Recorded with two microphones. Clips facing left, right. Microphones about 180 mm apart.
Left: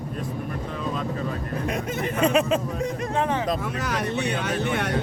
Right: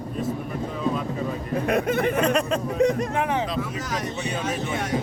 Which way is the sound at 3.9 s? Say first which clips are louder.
Left 3 dB; 65° left (ahead or behind).